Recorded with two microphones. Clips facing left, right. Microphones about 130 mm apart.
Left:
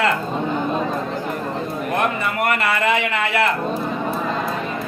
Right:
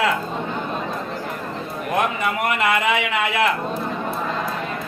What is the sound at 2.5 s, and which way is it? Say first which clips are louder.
Speech: left 1 dB; 15° right (ahead or behind).